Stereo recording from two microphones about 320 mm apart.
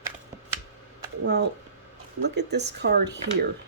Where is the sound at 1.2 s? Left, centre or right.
Right.